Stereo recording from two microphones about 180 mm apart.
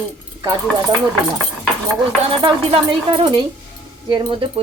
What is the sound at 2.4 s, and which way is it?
Speech, 30° right (ahead or behind).